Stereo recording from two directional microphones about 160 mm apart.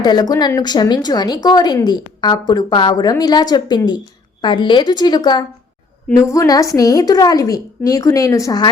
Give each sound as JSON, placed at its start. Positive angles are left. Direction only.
{"t": 0.0, "sound": "a woman's voice", "side_deg": 25}